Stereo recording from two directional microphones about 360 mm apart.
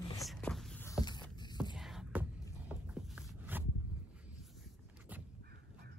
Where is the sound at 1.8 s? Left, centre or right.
Centre.